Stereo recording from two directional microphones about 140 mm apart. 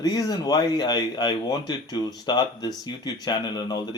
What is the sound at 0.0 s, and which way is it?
Speech, 25° left (ahead or behind).